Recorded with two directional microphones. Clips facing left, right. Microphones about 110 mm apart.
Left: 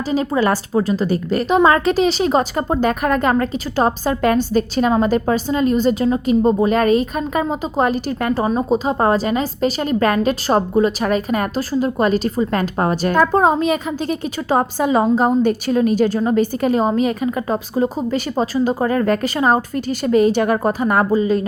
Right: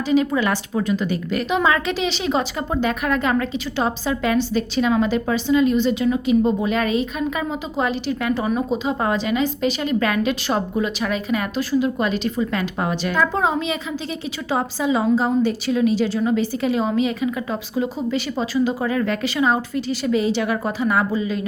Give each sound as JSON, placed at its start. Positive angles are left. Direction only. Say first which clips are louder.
{"t": 0.1, "sound": "a woman's voice", "louder": "left 1 dB", "side_deg": 35}